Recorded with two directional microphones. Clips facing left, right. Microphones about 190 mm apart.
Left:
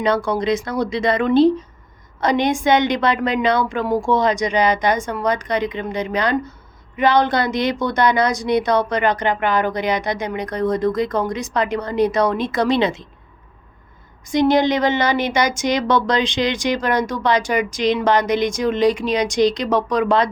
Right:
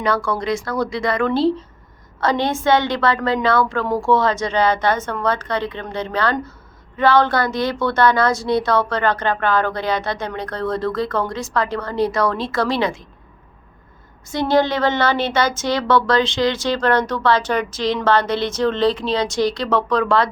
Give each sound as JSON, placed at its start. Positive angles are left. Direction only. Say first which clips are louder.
{"t": 0.0, "sound": "a woman's voice", "louder": "left 2 dB", "side_deg": 20}
{"t": 14.3, "sound": "a woman's voice", "louder": "left 2 dB", "side_deg": 15}